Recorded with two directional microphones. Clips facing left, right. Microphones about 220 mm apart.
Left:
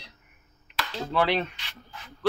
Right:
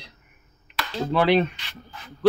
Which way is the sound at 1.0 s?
15° right (ahead or behind).